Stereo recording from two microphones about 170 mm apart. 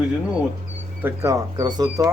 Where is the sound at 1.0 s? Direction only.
20° right (ahead or behind).